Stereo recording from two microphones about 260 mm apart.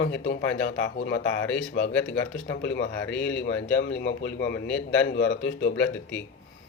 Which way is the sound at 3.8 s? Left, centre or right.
Left.